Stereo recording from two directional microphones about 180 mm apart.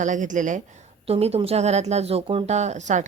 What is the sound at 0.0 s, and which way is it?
A woman's voice, 45° right (ahead or behind).